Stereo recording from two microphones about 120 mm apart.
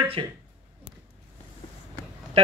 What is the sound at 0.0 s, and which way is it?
Speech, 45° right (ahead or behind).